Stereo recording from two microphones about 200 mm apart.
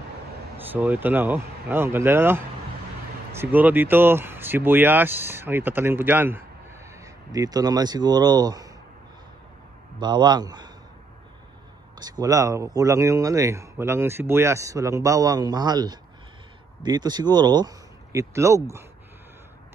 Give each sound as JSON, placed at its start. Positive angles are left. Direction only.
{"t": 0.7, "sound": "speech", "side_deg": -10}
{"t": 9.9, "sound": "speech", "side_deg": -20}
{"t": 12.0, "sound": "speech", "side_deg": -20}